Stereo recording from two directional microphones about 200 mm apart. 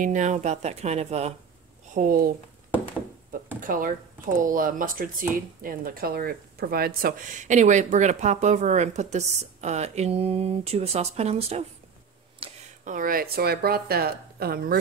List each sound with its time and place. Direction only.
0.0 s speech: 40° right (ahead or behind)
2.0 s speech: 45° right (ahead or behind)
3.6 s speech: 45° right (ahead or behind)
12.4 s a sound: 25° right (ahead or behind)
12.8 s speech: 40° right (ahead or behind)